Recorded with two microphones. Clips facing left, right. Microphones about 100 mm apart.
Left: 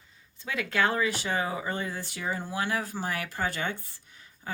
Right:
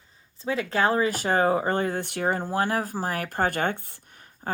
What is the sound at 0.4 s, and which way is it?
Speech, 30° right (ahead or behind).